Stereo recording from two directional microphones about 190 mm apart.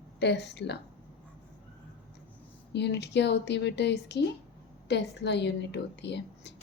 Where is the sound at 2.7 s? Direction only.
60° left (ahead or behind).